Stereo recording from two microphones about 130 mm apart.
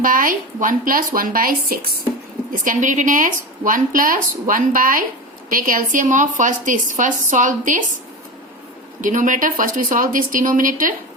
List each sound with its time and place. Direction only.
0.0 s a woman's voice: 90° right
9.0 s a woman's voice: 85° right